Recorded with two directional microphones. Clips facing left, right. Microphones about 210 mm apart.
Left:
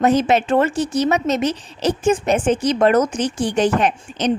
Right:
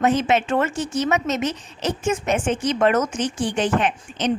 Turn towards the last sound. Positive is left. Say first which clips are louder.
# left 3 dB
turn(degrees=40)  # may be behind; listen again after turning